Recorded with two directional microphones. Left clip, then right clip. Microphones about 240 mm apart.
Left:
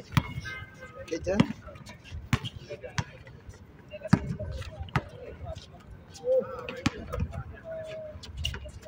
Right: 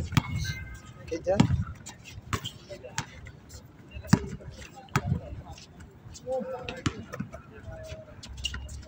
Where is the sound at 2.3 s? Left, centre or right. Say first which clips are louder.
Left 1 dB; left.